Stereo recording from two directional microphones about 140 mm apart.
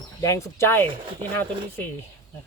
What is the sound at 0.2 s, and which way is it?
Speech, 20° left (ahead or behind).